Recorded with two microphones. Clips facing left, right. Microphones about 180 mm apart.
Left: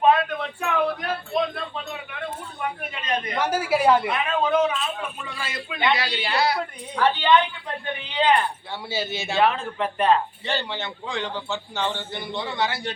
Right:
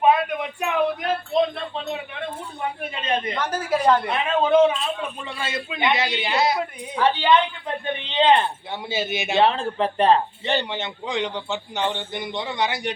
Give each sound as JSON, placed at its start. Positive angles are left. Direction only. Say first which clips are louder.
{"t": 0.0, "sound": "a sound", "louder": "even", "side_deg": -10}
{"t": 3.3, "sound": "a woman's voice", "louder": "left 1 dB", "side_deg": 10}
{"t": 4.1, "sound": "a man's voice", "louder": "right 4 dB", "side_deg": -25}
{"t": 8.0, "sound": "a sound", "louder": "right 3 dB", "side_deg": -25}
{"t": 8.9, "sound": "a man's voice", "louder": "right 3 dB", "side_deg": -20}
{"t": 9.4, "sound": "speech", "louder": "right 2 dB", "side_deg": -30}
{"t": 10.4, "sound": "a man's voice", "louder": "right 3 dB", "side_deg": -20}